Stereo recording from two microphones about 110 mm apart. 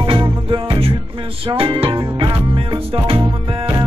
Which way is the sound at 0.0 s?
50° right (ahead or behind).